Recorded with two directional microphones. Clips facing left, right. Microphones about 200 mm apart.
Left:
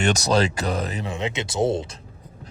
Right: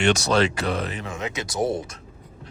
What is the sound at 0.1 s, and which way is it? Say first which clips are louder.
Speech: even; 40° left (ahead or behind).